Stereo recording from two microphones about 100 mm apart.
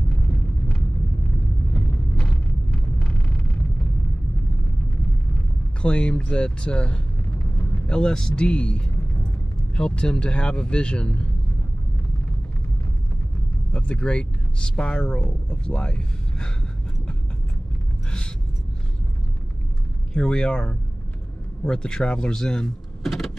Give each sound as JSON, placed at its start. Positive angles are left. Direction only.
{"t": 2.1, "sound": "vehicle", "side_deg": 5}
{"t": 5.8, "sound": "speech", "side_deg": 10}
{"t": 13.7, "sound": "speech", "side_deg": 10}
{"t": 20.2, "sound": "speech", "side_deg": 10}